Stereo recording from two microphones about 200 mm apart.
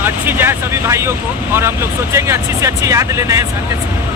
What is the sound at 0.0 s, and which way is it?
Speech, 10° right (ahead or behind).